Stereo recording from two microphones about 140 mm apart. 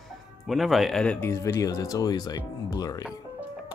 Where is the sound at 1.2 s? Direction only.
20° left (ahead or behind).